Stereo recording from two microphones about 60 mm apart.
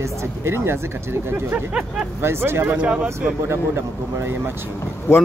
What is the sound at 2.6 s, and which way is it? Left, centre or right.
Speech, centre.